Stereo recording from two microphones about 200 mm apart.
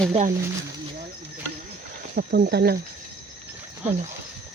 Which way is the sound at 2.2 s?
50° right (ahead or behind).